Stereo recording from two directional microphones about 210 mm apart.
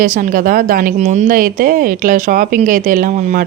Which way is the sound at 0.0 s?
40° right (ahead or behind).